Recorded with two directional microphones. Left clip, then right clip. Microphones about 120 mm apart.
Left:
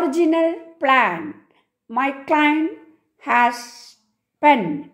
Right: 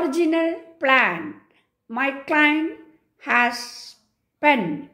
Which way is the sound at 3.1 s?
40° left (ahead or behind).